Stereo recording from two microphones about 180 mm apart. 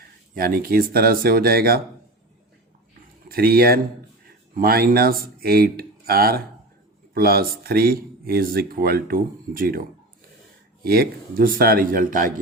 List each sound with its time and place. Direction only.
0.3 s speech: 55° right (ahead or behind)
3.2 s speech: 55° right (ahead or behind)
10.8 s speech: 55° right (ahead or behind)